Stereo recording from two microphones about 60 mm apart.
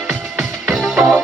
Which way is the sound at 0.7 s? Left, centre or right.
Centre.